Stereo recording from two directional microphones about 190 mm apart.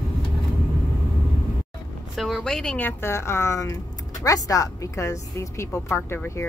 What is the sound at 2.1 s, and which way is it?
Speech, centre (ahead or behind).